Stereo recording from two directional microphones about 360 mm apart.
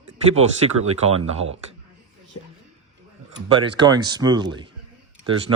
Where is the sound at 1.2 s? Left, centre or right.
Centre.